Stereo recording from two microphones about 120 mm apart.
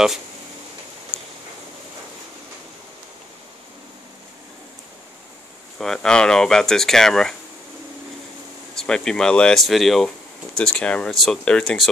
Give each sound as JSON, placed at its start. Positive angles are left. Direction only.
{"t": 1.1, "sound": "a sound", "side_deg": 50}
{"t": 5.8, "sound": "speech", "side_deg": 5}
{"t": 8.7, "sound": "speech", "side_deg": 5}